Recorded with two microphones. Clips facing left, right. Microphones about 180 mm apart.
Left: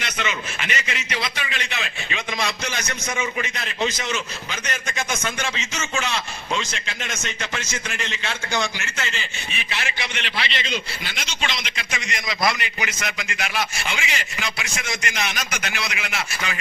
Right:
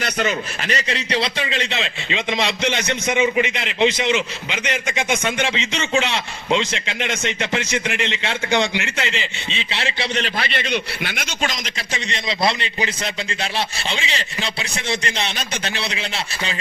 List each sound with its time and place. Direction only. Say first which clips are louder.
0.0 s a man's voice: right 6 dB; 40° right (ahead or behind); by 5.0 s 15° right (ahead or behind)
5.2 s a man's voice: right 6 dB; 30° right (ahead or behind)